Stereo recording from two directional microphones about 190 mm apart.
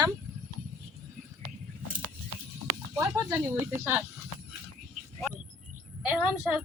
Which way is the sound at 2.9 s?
15° right (ahead or behind).